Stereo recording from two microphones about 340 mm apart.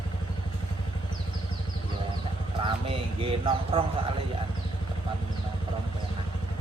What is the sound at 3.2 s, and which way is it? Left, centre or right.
Speech, centre.